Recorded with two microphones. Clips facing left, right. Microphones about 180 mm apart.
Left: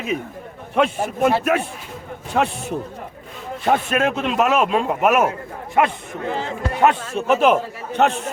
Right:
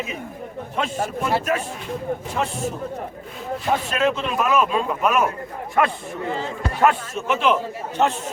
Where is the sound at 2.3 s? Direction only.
65° left (ahead or behind).